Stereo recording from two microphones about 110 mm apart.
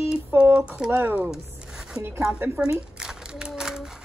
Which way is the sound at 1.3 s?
5° right (ahead or behind).